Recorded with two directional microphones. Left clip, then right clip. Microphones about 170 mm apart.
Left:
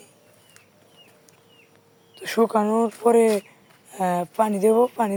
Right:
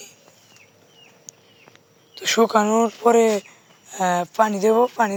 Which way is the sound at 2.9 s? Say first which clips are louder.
Even; 10° left (ahead or behind).